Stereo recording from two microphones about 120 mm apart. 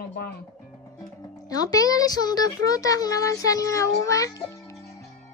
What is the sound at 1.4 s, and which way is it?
A child's voice, 30° left (ahead or behind).